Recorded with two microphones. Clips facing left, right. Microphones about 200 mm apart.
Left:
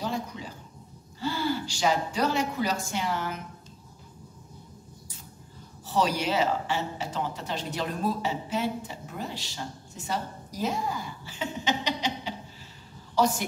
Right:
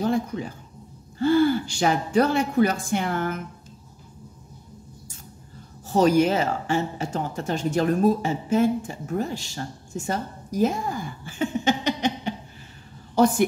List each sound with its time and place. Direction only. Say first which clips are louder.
0.0 s speech: right 8 dB; 55° right (ahead or behind)
5.9 s a woman's voice: right 8 dB; 50° right (ahead or behind)